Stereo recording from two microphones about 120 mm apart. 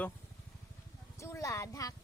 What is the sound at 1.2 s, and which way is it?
Speech, 25° left (ahead or behind).